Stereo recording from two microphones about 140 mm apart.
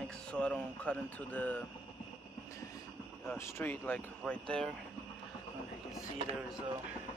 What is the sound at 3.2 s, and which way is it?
Speech, 15° left (ahead or behind).